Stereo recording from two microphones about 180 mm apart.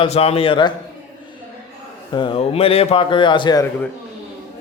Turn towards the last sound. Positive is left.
turn(degrees=20)  # may be behind; listen again after turning